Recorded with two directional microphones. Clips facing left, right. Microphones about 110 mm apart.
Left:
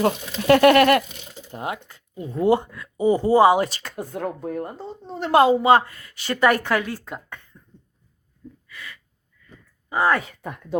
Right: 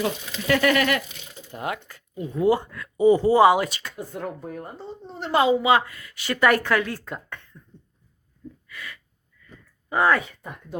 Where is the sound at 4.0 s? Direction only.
55° left (ahead or behind); by 6.9 s 20° left (ahead or behind).